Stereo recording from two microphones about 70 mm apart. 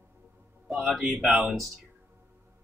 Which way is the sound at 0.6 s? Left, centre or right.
Centre.